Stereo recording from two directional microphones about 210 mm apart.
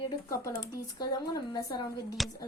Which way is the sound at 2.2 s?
Centre (ahead or behind).